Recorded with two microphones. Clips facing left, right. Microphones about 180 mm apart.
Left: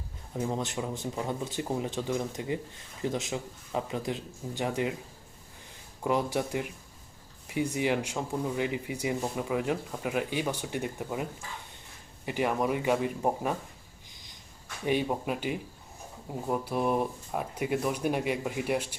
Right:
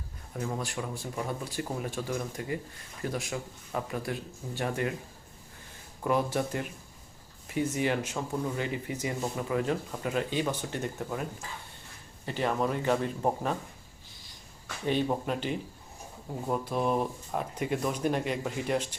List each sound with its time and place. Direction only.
0.3 s speech: 20° left (ahead or behind)
6.0 s speech: 15° left (ahead or behind)
15.0 s speech: 10° left (ahead or behind)